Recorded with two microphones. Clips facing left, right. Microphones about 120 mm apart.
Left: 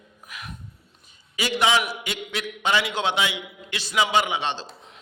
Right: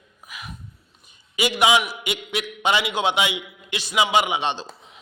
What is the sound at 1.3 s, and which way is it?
A man's voice, 15° right (ahead or behind).